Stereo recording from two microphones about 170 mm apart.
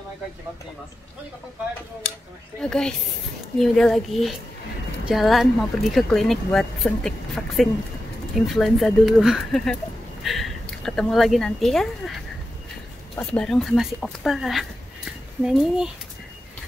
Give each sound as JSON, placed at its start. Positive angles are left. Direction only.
{"t": 2.6, "sound": "speech", "side_deg": 5}